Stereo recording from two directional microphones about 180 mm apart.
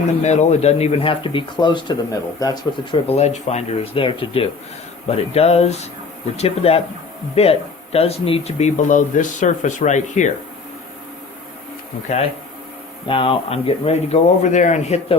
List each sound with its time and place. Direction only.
0.2 s speech: 40° left (ahead or behind); by 3.0 s 20° left (ahead or behind)
3.1 s speech: 35° left (ahead or behind)
13.1 s speech: 30° left (ahead or behind)